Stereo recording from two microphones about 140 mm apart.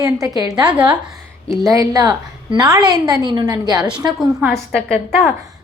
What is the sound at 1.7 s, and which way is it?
A woman's voice, 25° right (ahead or behind).